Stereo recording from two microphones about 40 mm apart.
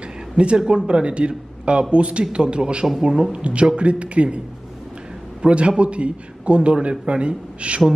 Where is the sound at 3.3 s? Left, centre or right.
Right.